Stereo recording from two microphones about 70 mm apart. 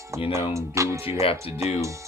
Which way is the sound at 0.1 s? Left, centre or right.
Right.